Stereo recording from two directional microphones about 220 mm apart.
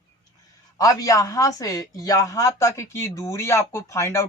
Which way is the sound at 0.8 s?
15° left (ahead or behind).